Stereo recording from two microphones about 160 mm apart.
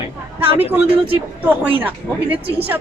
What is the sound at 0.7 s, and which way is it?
Speech, 10° right (ahead or behind).